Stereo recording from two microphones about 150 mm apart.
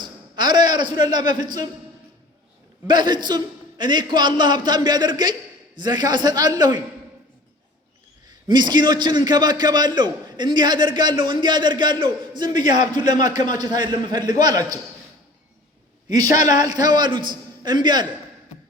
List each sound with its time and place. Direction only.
0.0 s a sound: 30° right (ahead or behind)
2.8 s a man's voice: 30° right (ahead or behind)
8.3 s a man's voice: 30° right (ahead or behind)
16.0 s a woman's voice: 25° right (ahead or behind)